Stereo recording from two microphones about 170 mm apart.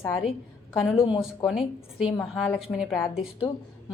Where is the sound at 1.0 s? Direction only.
30° left (ahead or behind).